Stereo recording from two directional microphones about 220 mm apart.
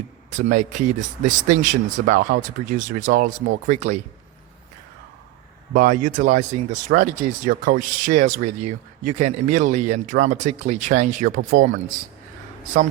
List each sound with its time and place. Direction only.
0.3 s speech: 35° right (ahead or behind)
5.7 s speech: 35° right (ahead or behind)